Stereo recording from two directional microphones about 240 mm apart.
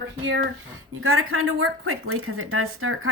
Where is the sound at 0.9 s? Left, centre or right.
Right.